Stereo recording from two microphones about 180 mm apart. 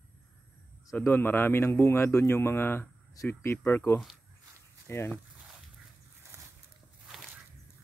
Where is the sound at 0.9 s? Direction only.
15° left (ahead or behind).